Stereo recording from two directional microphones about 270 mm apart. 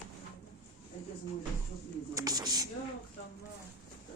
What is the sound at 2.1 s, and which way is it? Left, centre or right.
Speech, centre.